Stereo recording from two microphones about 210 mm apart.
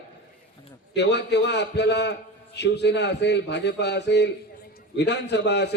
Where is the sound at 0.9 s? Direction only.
55° left (ahead or behind).